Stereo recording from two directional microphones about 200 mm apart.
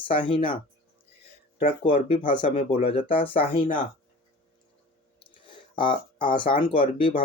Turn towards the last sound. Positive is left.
turn(degrees=25)  # may be behind; listen again after turning